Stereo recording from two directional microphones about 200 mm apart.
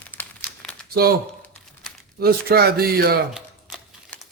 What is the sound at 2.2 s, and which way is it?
Speech, 50° right (ahead or behind).